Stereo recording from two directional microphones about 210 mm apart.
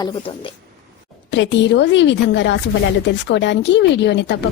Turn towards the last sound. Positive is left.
turn(degrees=55)  # may be behind; listen again after turning